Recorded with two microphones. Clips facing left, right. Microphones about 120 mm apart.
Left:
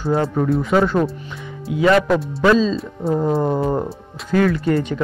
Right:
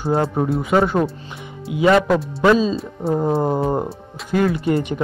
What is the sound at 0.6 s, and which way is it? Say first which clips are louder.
Speech: right 1 dB; 10° right (ahead or behind).